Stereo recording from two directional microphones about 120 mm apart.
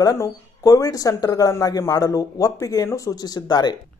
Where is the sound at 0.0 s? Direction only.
25° left (ahead or behind).